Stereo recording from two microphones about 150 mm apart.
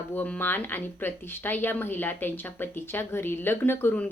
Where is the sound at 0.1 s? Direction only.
10° left (ahead or behind).